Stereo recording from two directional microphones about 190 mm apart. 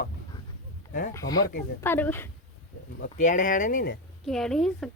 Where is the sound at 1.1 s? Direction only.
20° left (ahead or behind).